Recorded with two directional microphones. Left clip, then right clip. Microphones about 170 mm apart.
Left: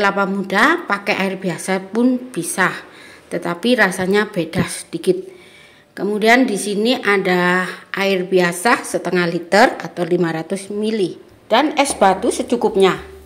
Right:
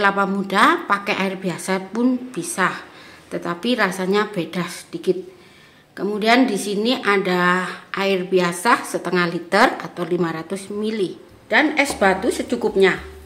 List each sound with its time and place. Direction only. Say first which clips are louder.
0.0 s a woman's voice: left 1 dB; 15° left (ahead or behind)